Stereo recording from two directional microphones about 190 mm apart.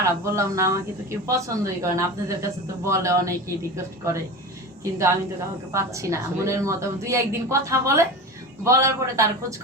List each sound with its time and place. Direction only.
0.0 s a woman's voice: 15° right (ahead or behind)
4.8 s a woman's voice: 15° right (ahead or behind)